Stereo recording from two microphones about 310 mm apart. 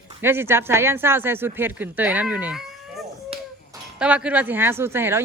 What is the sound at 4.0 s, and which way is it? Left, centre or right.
Speech, centre.